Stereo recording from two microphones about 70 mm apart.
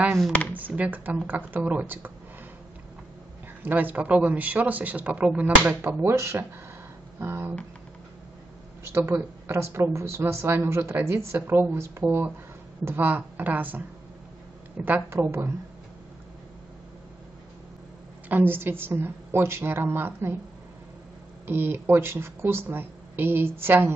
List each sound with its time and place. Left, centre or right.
0.3 s speech: left
0.6 s speech: right
3.6 s speech: right
9.1 s speech: right
15.0 s speech: right
18.3 s speech: right
21.5 s speech: right